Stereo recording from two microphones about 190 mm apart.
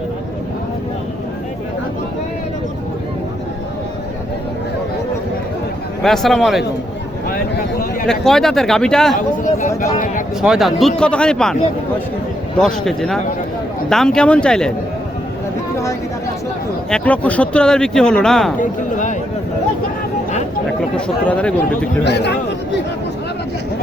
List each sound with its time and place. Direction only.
6.0 s speech: centre (ahead or behind)
8.0 s speech: 5° left (ahead or behind)
9.1 s a sound: 45° left (ahead or behind)
10.4 s speech: centre (ahead or behind)
12.5 s speech: centre (ahead or behind)
16.9 s speech: 5° left (ahead or behind)
18.6 s speech: 40° left (ahead or behind)
20.9 s speech: 5° left (ahead or behind)
22.0 s a man's voice: 60° left (ahead or behind)